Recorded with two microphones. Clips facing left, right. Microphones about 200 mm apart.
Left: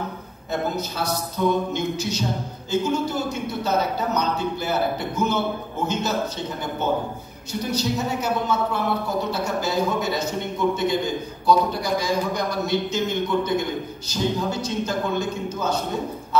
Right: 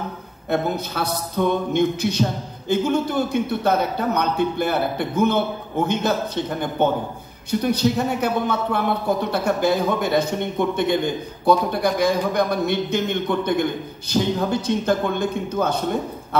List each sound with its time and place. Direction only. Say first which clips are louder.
0.5 s a man's voice: right 3 dB; 60° right (ahead or behind)